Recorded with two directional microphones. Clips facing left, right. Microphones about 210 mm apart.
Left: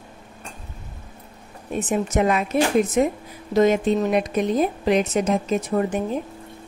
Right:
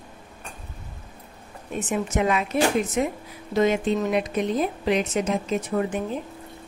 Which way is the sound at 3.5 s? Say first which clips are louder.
Left 4 dB; 45° left (ahead or behind).